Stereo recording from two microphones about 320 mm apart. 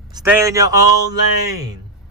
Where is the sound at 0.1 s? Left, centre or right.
Centre.